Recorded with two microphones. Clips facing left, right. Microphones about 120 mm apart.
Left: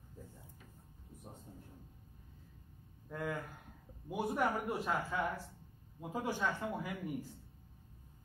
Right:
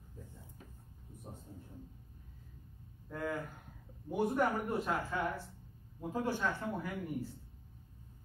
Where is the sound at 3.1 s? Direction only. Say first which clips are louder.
Right 2 dB; centre (ahead or behind).